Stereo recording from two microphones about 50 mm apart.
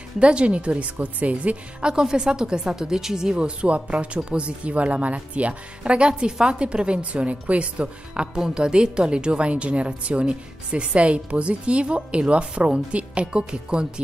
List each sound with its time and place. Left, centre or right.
0.2 s speech: right
1.9 s speech: centre